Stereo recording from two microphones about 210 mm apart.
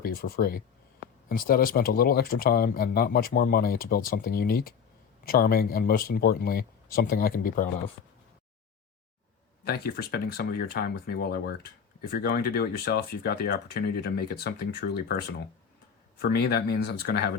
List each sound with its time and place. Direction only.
0.0 s speech: 45° left (ahead or behind)
9.6 s speech: 45° left (ahead or behind)